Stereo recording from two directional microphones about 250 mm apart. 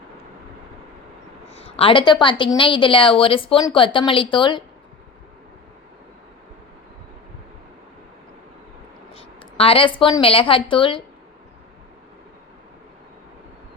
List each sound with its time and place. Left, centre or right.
1.5 s a woman's voice: left
9.1 s speech: left